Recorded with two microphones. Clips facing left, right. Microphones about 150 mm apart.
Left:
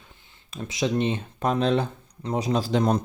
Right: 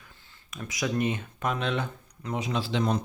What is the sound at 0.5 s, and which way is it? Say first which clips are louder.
Speech: left 4 dB; 25° left (ahead or behind).